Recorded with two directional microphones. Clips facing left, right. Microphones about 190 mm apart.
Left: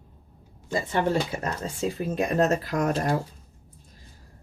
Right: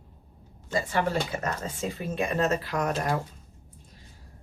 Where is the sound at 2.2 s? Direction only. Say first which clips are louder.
Left 3 dB; 40° left (ahead or behind).